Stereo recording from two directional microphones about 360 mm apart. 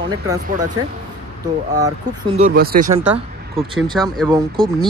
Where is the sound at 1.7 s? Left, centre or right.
Centre.